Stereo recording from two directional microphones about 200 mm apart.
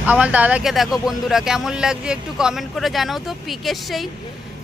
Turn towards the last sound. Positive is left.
turn(degrees=0)  # may be behind; listen again after turning